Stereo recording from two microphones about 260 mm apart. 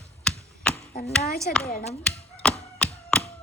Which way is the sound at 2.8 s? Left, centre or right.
Centre.